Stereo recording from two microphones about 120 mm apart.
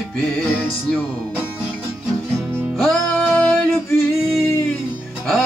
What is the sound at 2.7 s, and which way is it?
Music, 5° left (ahead or behind).